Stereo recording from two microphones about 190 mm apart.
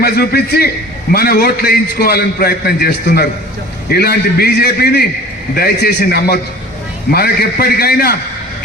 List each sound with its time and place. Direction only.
0.0 s a man's voice: 55° left (ahead or behind)